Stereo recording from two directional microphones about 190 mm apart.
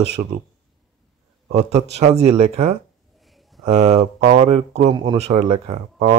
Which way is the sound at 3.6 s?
35° right (ahead or behind).